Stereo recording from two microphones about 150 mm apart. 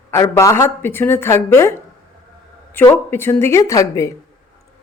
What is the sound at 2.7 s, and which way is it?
Speech, 15° left (ahead or behind).